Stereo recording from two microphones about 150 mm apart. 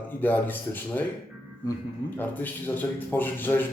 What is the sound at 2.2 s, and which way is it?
A man's voice, 10° left (ahead or behind).